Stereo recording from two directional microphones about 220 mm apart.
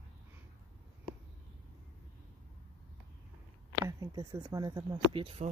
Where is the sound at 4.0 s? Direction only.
15° right (ahead or behind).